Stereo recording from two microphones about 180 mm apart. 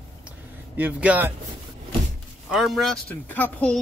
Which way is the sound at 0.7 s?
10° right (ahead or behind).